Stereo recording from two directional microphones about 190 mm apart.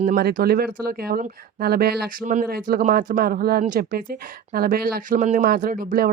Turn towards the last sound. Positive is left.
turn(degrees=-45)  # may be behind; listen again after turning